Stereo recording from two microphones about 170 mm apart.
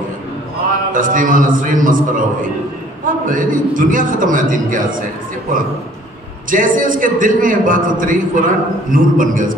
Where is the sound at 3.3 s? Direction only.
50° right (ahead or behind).